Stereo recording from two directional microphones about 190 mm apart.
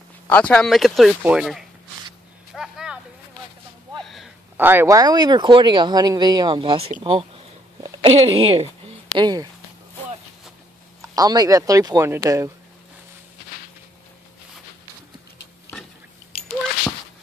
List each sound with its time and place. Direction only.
0.3 s speech: 5° left (ahead or behind)
2.5 s a sound: 5° right (ahead or behind)
4.0 s a sound: centre (ahead or behind)
4.6 s speech: 10° right (ahead or behind); by 8.9 s 30° right (ahead or behind)
9.1 s speech: 20° right (ahead or behind)
11.0 s speech: 20° right (ahead or behind)